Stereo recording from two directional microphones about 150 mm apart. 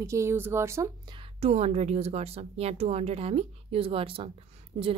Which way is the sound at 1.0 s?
35° right (ahead or behind).